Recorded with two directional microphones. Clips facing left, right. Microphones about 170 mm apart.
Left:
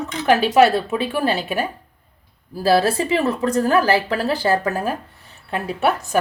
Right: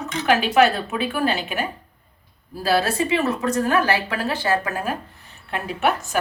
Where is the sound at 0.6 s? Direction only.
30° left (ahead or behind).